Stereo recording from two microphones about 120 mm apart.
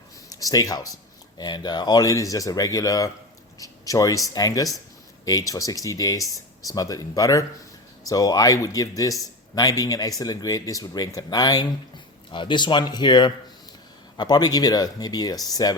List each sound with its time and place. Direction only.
0.3 s speech: 30° left (ahead or behind)